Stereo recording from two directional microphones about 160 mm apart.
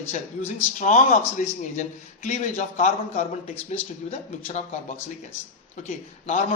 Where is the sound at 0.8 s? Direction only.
50° left (ahead or behind).